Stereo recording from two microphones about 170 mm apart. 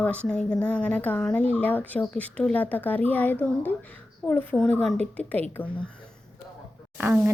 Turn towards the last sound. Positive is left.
turn(degrees=-10)  # may be behind; listen again after turning